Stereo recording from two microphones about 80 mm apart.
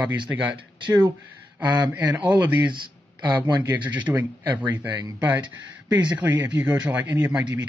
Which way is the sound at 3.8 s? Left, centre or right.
Right.